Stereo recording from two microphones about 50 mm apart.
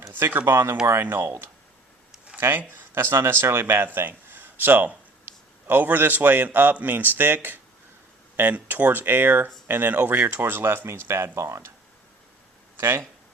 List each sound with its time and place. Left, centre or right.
0.1 s speech: right
2.4 s a man's voice: right
10.6 s speech: right
12.7 s speech: right